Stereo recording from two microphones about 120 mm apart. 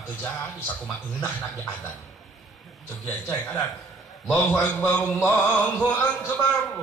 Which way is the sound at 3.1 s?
20° left (ahead or behind).